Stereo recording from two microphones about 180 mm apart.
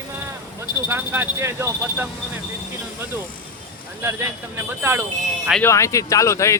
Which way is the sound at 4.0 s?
15° right (ahead or behind).